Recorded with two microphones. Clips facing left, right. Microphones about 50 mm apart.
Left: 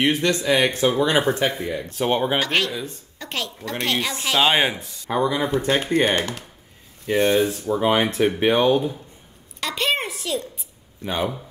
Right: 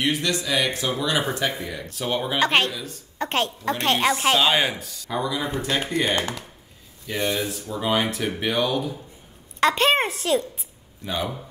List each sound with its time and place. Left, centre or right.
0.0 s speech: left
2.4 s a woman's voice: right
2.7 s speech: left
3.2 s a woman's voice: right
4.4 s speech: left
9.6 s a woman's voice: right
11.1 s speech: left